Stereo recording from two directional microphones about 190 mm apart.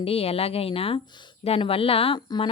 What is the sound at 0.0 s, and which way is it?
A woman's voice, 30° left (ahead or behind).